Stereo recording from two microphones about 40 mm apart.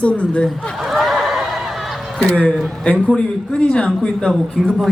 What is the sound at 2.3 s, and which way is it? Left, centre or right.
Speech, left.